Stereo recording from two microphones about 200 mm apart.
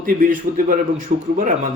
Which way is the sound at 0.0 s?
45° right (ahead or behind).